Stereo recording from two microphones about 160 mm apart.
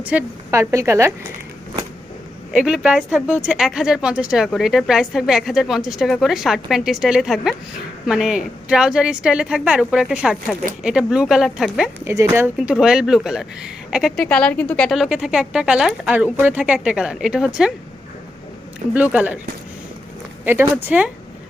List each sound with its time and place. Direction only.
0.0 s a woman's voice: 10° right (ahead or behind)
2.5 s speech: 5° right (ahead or behind)
12.0 s a woman's voice: 20° right (ahead or behind)
12.5 s speech: 5° right (ahead or behind)
18.9 s a woman's voice: 10° right (ahead or behind)
20.4 s a woman's voice: 10° right (ahead or behind)